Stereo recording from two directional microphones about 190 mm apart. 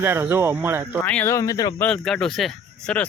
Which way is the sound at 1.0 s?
5° left (ahead or behind).